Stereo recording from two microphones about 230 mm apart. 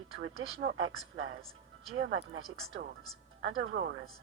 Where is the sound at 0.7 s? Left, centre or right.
Right.